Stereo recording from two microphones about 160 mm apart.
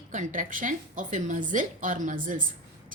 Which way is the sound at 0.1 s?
50° right (ahead or behind).